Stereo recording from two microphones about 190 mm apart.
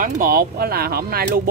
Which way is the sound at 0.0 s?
50° right (ahead or behind).